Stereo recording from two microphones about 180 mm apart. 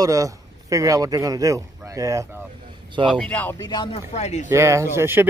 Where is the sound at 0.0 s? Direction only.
20° right (ahead or behind).